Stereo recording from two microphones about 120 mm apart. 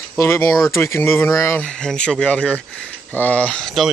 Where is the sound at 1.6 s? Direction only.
5° left (ahead or behind).